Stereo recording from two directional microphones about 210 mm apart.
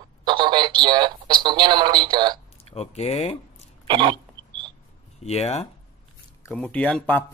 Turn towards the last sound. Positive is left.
turn(degrees=5)  # may be behind; listen again after turning